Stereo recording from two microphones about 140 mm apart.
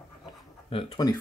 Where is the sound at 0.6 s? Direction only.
40° left (ahead or behind).